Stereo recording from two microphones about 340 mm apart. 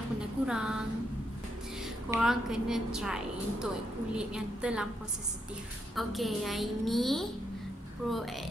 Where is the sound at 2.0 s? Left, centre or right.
Centre.